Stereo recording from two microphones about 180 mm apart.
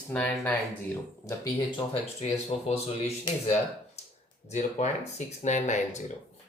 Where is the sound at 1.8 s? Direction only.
35° left (ahead or behind).